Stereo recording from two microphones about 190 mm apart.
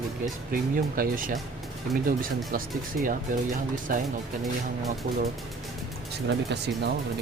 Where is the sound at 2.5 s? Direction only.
50° right (ahead or behind).